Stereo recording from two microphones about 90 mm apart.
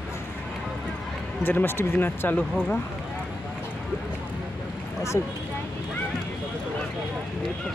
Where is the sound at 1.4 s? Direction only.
25° left (ahead or behind).